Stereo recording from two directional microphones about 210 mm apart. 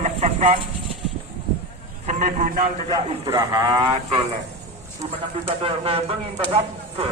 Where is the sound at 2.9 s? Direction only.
20° right (ahead or behind).